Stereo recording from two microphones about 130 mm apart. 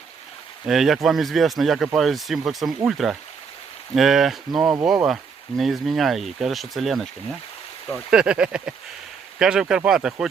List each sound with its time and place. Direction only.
0.7 s speech: centre (ahead or behind)